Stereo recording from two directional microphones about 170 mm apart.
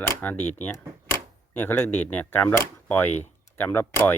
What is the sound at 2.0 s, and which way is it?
Speech, 10° left (ahead or behind).